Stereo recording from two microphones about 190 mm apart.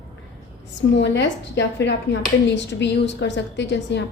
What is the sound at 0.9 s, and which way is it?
A woman's voice, 70° left (ahead or behind).